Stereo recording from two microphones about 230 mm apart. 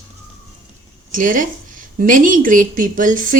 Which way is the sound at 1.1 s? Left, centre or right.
Right.